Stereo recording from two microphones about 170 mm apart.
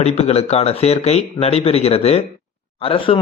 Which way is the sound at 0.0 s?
35° left (ahead or behind).